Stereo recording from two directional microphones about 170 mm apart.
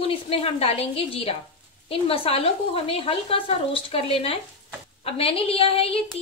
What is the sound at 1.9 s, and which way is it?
A woman's voice, 35° left (ahead or behind).